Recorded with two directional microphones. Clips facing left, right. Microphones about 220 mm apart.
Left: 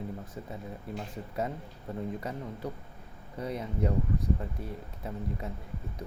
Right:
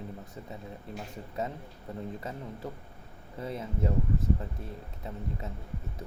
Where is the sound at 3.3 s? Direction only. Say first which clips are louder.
Left 1 dB; centre (ahead or behind).